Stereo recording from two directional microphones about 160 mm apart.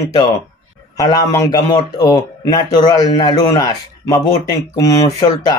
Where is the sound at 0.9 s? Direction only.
20° left (ahead or behind).